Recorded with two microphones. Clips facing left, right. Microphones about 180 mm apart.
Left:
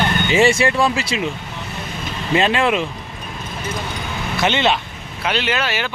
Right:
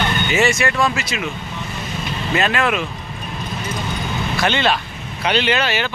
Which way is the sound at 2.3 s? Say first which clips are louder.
Left 3 dB; 25° left (ahead or behind).